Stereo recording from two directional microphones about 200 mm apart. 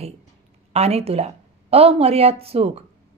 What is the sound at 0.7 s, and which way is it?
A woman's voice, 30° right (ahead or behind).